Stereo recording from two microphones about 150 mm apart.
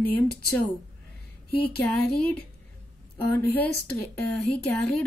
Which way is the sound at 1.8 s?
5° left (ahead or behind).